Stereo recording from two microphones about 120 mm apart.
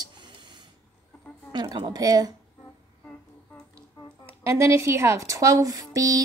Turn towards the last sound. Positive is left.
turn(degrees=-30)  # may be behind; listen again after turning